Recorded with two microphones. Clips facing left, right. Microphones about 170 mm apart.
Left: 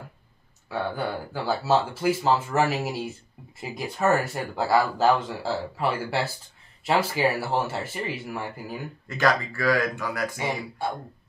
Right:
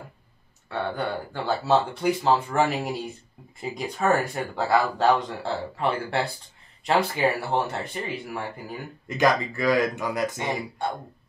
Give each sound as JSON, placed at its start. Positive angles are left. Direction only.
{"t": 0.7, "sound": "speech", "side_deg": 5}
{"t": 9.0, "sound": "speech", "side_deg": -20}